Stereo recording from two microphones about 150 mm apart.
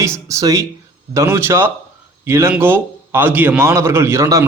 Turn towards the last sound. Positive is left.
turn(degrees=-20)  # may be behind; listen again after turning